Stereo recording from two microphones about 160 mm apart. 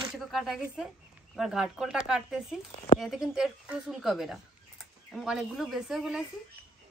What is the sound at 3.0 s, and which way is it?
Speech, 5° right (ahead or behind).